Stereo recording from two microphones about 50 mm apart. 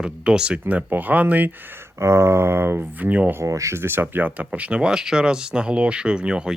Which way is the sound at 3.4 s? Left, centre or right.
Right.